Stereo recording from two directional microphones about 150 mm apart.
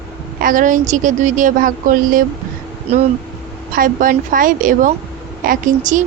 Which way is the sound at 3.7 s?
65° right (ahead or behind).